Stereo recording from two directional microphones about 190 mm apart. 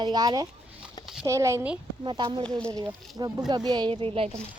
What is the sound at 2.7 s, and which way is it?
Speech, 20° right (ahead or behind).